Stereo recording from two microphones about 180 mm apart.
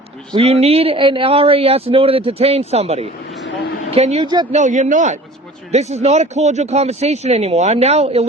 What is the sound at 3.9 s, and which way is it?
Speech, 35° right (ahead or behind).